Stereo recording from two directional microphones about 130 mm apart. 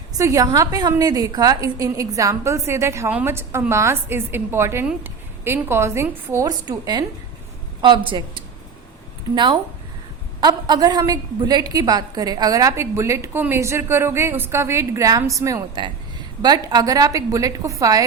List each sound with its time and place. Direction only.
0.1 s a woman's voice: 25° right (ahead or behind)
9.3 s a woman's voice: 35° right (ahead or behind)